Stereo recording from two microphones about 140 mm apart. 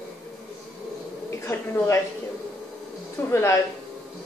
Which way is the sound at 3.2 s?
15° left (ahead or behind).